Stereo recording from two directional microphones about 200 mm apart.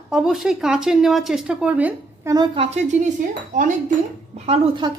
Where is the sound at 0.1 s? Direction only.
Centre (ahead or behind).